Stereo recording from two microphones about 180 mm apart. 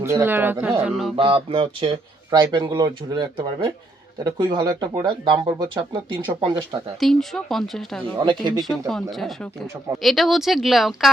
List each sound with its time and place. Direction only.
0.0 s speech: 15° right (ahead or behind)
1.1 s speech: 30° right (ahead or behind)
7.0 s speech: centre (ahead or behind)
8.2 s speech: 25° right (ahead or behind)
8.9 s speech: centre (ahead or behind)